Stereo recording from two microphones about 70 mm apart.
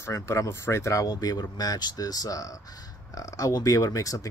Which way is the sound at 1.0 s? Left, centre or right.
Left.